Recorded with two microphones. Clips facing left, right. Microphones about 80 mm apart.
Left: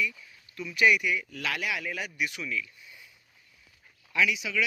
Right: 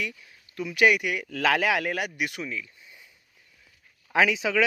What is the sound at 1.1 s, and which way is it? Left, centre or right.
Speech, right.